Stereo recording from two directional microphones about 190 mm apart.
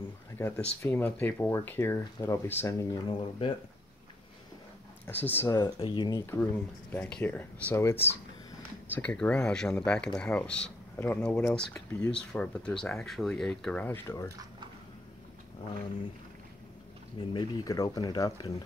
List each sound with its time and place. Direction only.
0.4 s speech: 10° left (ahead or behind)
5.0 s speech: 10° left (ahead or behind)
5.6 s speech: 25° left (ahead or behind)
17.2 s speech: 25° left (ahead or behind)